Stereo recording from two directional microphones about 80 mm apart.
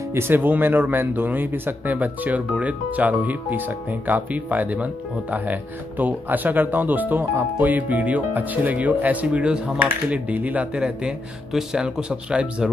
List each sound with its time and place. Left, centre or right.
0.1 s speech: right
10.8 s speech: centre